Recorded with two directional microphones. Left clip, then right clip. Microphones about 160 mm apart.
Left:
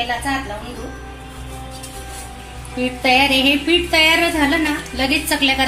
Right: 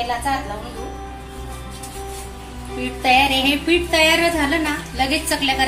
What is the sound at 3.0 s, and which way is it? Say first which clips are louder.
A woman's voice: left 1 dB; 35° left (ahead or behind).